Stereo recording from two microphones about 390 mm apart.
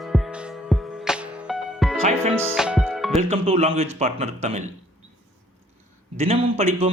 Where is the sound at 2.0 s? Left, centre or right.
Centre.